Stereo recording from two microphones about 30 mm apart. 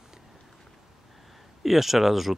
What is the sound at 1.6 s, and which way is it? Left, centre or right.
Speech, centre.